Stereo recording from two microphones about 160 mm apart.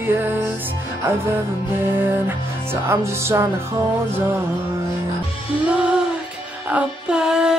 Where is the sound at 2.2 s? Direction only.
15° right (ahead or behind).